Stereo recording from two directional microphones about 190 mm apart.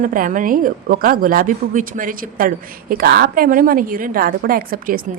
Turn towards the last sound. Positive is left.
turn(degrees=-50)  # may be behind; listen again after turning